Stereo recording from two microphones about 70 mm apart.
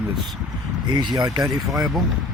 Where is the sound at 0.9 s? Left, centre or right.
Right.